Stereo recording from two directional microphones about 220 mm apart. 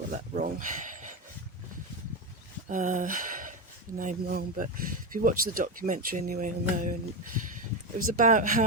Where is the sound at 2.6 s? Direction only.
35° right (ahead or behind).